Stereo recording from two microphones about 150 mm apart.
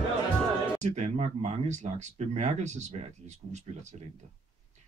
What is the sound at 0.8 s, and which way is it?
Speech, 50° right (ahead or behind).